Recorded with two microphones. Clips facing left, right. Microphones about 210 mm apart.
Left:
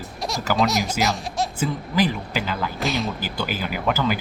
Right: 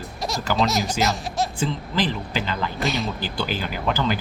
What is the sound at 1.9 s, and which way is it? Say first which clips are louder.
Speech: left 2 dB; 10° left (ahead or behind).